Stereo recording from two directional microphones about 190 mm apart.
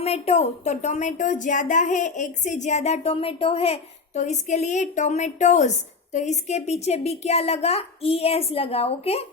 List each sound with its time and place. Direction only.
0.0 s a woman's voice: 35° left (ahead or behind)